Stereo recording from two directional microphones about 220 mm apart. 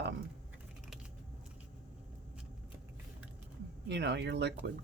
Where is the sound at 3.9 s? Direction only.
50° right (ahead or behind).